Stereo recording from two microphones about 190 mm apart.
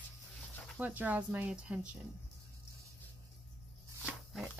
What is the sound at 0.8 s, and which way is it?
Speech, 10° right (ahead or behind).